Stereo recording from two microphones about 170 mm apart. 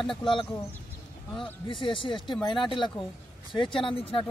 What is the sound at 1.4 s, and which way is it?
Speech, 30° left (ahead or behind).